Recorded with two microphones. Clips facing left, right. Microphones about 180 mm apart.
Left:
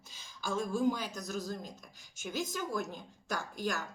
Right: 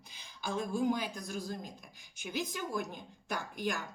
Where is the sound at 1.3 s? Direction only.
40° left (ahead or behind).